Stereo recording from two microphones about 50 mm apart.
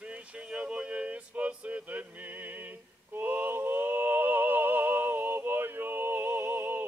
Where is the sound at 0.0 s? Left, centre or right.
Right.